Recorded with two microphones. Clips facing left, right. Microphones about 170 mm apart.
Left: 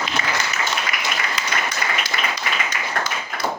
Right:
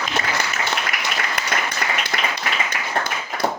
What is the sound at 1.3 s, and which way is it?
Applause, 60° right (ahead or behind).